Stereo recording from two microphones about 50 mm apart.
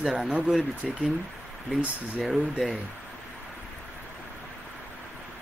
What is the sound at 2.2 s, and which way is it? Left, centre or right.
Speech, centre.